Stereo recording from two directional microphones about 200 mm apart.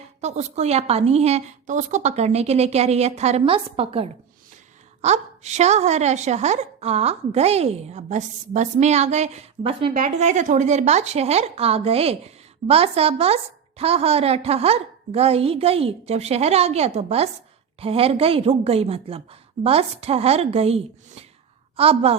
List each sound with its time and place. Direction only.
0.2 s a woman's voice: 35° right (ahead or behind)